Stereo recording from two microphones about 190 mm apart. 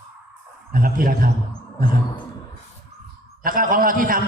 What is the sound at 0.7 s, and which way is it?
Speech, 50° right (ahead or behind).